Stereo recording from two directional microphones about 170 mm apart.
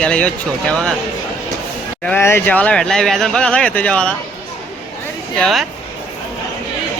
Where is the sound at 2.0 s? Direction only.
10° left (ahead or behind).